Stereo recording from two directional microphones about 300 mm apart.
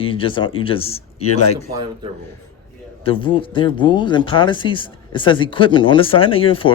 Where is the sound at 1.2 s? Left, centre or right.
Left.